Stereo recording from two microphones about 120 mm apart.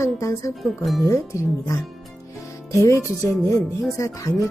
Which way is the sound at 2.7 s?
25° left (ahead or behind).